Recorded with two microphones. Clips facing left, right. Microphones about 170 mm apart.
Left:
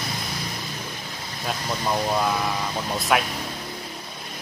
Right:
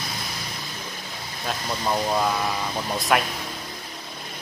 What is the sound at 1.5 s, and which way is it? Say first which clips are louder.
Speech: even; centre (ahead or behind).